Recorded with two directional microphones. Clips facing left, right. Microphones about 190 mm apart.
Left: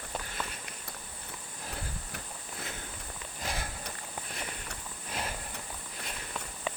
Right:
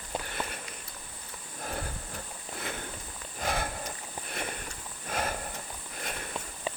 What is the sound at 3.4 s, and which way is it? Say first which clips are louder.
Sniff: right 6 dB; 60° right (ahead or behind).